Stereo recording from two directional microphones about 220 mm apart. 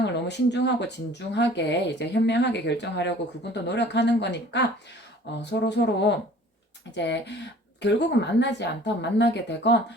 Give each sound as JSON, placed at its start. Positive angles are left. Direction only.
{"t": 0.0, "sound": "speech", "side_deg": 50}